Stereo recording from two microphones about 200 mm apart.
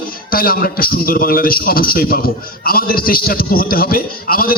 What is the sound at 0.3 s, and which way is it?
A man's voice, 45° left (ahead or behind).